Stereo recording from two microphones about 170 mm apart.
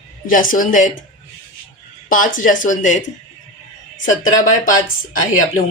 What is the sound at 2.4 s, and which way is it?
Speech, 50° left (ahead or behind).